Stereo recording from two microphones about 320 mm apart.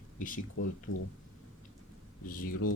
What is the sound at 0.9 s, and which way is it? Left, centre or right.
Speech, left.